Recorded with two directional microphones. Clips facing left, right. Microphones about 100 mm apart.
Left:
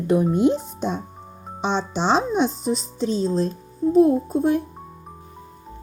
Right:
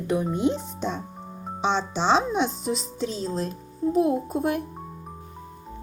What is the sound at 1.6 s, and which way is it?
Speech, 40° left (ahead or behind).